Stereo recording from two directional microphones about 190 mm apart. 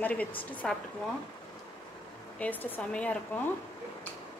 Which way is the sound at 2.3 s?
10° left (ahead or behind).